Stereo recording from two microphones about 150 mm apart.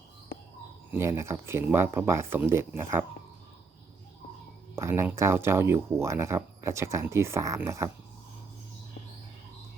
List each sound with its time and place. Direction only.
0.9 s speech: 20° right (ahead or behind)
4.7 s speech: 15° right (ahead or behind)